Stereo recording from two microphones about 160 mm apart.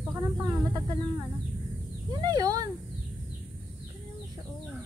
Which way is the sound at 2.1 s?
25° right (ahead or behind).